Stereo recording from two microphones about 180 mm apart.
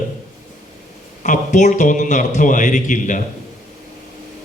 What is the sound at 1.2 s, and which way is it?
A man's voice, 45° left (ahead or behind).